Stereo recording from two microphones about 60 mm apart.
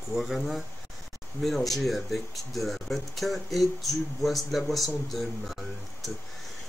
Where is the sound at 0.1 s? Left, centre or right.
Centre.